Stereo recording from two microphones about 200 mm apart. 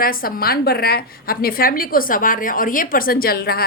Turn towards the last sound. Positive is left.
turn(degrees=50)  # may be behind; listen again after turning